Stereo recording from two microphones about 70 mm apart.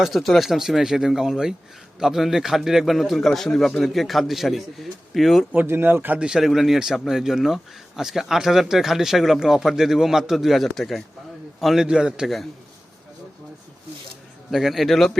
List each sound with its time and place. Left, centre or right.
0.0 s speech: centre
5.6 s speech: right
6.1 s a man's voice: centre
14.5 s speech: centre